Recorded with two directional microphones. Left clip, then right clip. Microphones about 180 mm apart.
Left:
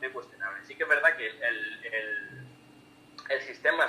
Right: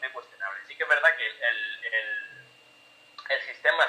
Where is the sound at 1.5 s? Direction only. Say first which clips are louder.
Right 3 dB; 20° left (ahead or behind).